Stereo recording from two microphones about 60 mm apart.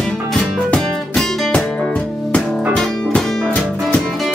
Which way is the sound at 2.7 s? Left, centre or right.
Centre.